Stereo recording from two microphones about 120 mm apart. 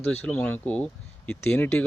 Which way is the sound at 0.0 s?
15° left (ahead or behind).